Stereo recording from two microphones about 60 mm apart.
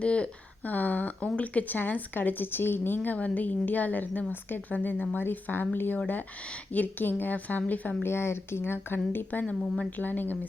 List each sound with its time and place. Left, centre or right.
0.0 s a woman's voice: centre
8.0 s speech: left